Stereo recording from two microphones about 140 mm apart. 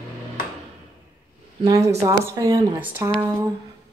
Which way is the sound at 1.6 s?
25° right (ahead or behind).